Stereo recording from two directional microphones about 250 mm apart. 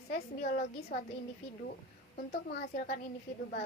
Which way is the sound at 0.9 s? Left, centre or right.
Left.